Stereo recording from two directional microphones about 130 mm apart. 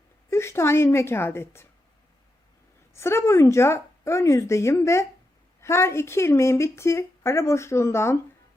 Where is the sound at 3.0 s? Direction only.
20° left (ahead or behind).